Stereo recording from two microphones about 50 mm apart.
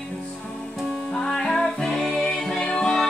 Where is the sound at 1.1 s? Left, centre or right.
Centre.